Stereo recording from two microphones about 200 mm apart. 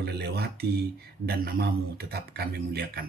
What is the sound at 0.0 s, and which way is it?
Speech, 55° right (ahead or behind).